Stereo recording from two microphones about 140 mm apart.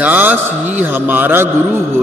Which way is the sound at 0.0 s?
10° right (ahead or behind).